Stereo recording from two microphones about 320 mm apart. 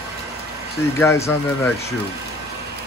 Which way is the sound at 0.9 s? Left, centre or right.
Centre.